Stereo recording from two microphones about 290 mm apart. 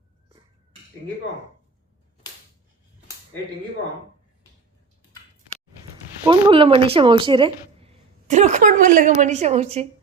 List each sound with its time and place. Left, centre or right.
6.2 s speech: centre